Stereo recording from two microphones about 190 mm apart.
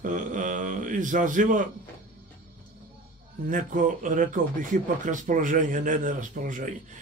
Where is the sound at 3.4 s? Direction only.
45° right (ahead or behind).